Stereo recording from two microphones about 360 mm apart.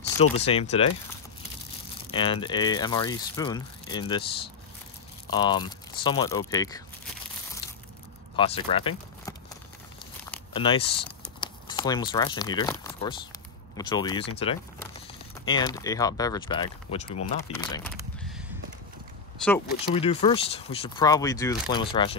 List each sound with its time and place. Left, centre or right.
0.0 s speech: centre
2.1 s speech: centre
5.3 s speech: centre
8.4 s speech: centre
10.5 s speech: centre
11.1 s crumpling: centre
13.7 s speech: centre
19.4 s speech: centre
19.9 s speech: centre